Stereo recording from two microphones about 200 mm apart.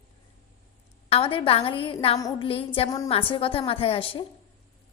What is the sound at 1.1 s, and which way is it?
A woman's voice, 25° left (ahead or behind).